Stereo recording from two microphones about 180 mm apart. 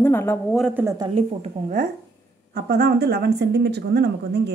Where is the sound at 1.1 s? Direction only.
40° right (ahead or behind).